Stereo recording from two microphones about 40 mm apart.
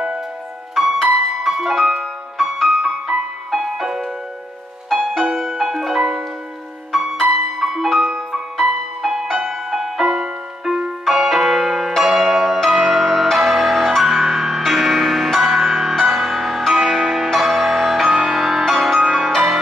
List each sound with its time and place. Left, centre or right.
1.0 s music: centre
12.0 s change ringing: centre
12.6 s music: centre
18.0 s music: centre